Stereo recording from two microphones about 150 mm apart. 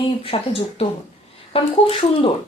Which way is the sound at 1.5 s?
35° left (ahead or behind).